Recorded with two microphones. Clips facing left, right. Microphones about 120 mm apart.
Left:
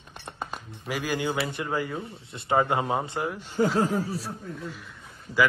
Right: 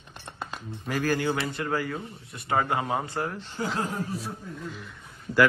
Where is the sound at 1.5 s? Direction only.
20° left (ahead or behind).